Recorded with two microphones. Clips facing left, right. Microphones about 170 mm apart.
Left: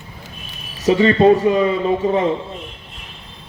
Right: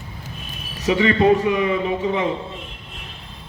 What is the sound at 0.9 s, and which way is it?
A man's voice, 35° left (ahead or behind).